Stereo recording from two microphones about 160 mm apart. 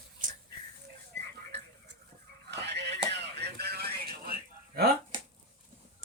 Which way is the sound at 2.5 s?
90° right.